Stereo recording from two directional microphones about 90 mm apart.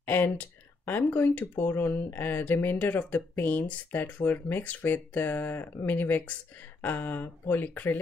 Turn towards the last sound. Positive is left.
turn(degrees=20)  # may be behind; listen again after turning